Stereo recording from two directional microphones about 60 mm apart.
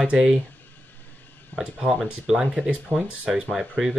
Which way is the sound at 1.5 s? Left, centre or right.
Centre.